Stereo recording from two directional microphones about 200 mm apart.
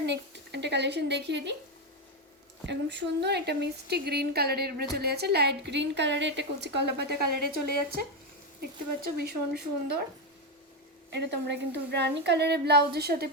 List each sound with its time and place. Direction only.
0.0 s speech: 60° right (ahead or behind)
2.6 s a woman's voice: 60° right (ahead or behind)
9.1 s speech: 55° right (ahead or behind)
11.1 s a woman's voice: 60° right (ahead or behind)